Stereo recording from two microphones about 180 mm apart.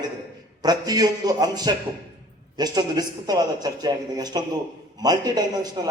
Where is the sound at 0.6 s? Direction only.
20° right (ahead or behind).